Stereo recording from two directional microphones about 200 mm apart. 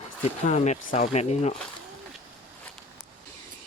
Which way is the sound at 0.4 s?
35° left (ahead or behind).